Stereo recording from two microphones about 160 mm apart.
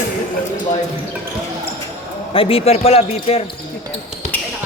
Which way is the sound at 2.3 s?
35° left (ahead or behind).